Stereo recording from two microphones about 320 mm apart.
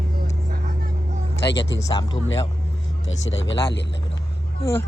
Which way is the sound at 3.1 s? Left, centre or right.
Left.